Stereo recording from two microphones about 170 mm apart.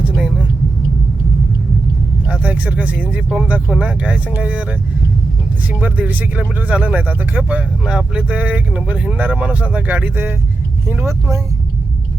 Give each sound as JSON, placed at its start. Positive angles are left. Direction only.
{"t": 0.0, "sound": "vehicle", "side_deg": -5}
{"t": 2.2, "sound": "speech", "side_deg": -10}